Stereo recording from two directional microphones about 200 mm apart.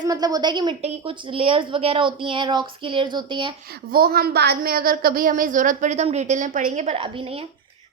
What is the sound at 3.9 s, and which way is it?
A woman's voice, 50° right (ahead or behind).